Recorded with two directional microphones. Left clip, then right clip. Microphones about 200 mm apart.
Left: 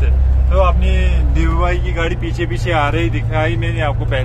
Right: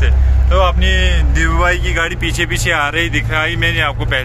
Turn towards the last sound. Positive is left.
turn(degrees=5)  # may be behind; listen again after turning